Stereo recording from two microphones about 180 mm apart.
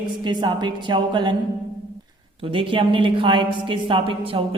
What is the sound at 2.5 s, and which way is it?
A woman's voice, 30° right (ahead or behind).